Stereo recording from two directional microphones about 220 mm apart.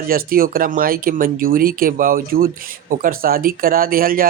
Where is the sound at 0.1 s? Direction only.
40° right (ahead or behind).